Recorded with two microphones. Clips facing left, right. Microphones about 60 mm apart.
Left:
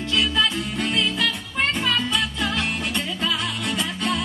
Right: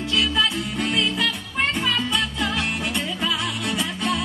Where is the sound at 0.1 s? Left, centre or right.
Centre.